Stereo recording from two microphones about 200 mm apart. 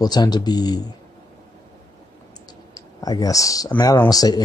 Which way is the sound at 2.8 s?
20° left (ahead or behind).